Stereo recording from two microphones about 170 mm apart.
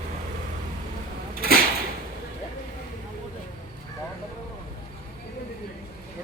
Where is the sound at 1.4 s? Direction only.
60° right (ahead or behind).